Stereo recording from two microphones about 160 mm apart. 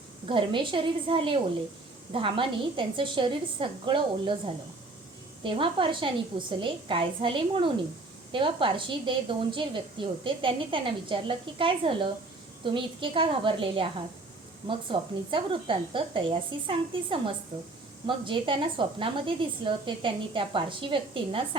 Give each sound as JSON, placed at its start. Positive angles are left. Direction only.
{"t": 0.3, "sound": "a woman's voice", "side_deg": -30}
{"t": 5.4, "sound": "a woman's voice", "side_deg": -35}